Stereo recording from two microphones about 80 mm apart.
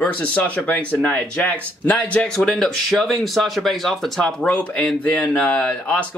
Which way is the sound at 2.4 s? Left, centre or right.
Centre.